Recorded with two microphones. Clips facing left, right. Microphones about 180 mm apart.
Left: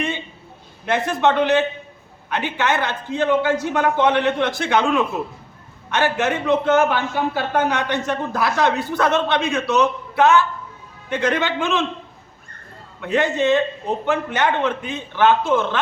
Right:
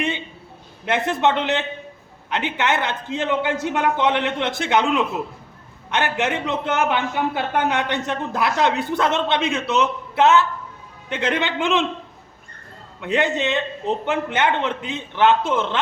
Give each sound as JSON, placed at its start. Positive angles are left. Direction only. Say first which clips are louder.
{"t": 0.9, "sound": "a man's voice", "louder": "left 1 dB", "side_deg": -20}
{"t": 13.0, "sound": "a man's voice", "louder": "left 2 dB", "side_deg": -20}